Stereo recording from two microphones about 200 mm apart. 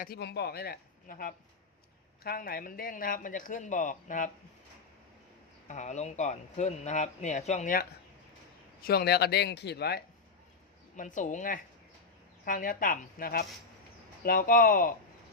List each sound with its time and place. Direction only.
0.0 s speech: 50° left (ahead or behind)
5.6 s speech: 35° left (ahead or behind); by 10.0 s 55° left (ahead or behind)
10.9 s speech: 40° left (ahead or behind)